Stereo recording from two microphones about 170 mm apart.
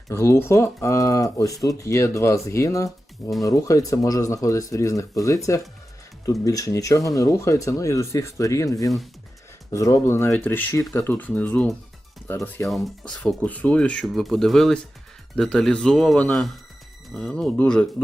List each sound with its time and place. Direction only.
0.1 s speech: 15° left (ahead or behind)
12.6 s speech: centre (ahead or behind)